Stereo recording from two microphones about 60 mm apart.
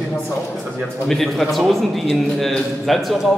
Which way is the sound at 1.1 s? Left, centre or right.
Centre.